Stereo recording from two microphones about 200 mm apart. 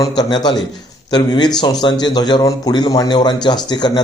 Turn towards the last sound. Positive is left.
turn(degrees=20)  # may be behind; listen again after turning